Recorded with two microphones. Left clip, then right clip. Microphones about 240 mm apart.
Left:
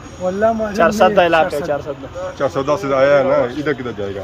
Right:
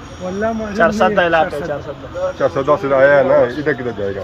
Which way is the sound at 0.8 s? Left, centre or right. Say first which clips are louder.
Even; left.